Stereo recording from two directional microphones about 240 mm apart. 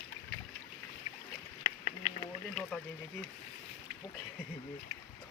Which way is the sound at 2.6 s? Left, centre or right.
Centre.